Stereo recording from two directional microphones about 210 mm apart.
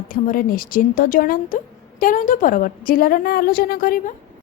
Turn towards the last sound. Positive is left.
turn(degrees=45)  # may be behind; listen again after turning